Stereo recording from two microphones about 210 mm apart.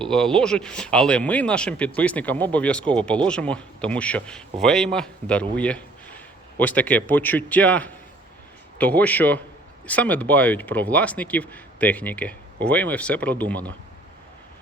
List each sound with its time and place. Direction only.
0.0 s a man's voice: 5° left (ahead or behind)